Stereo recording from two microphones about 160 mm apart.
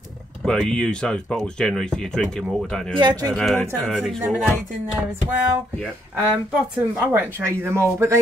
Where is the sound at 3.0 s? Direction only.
25° right (ahead or behind).